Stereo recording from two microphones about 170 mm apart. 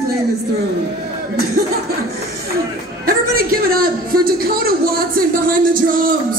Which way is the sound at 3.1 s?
60° right (ahead or behind).